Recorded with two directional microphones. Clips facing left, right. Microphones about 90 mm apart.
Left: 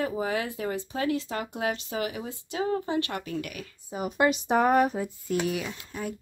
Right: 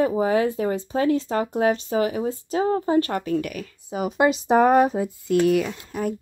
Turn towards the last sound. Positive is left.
turn(degrees=-50)  # may be behind; listen again after turning